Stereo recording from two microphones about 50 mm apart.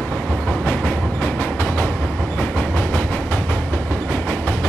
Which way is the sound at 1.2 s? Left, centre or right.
Left.